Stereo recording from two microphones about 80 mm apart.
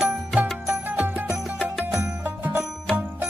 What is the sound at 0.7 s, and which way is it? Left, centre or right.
Music, right.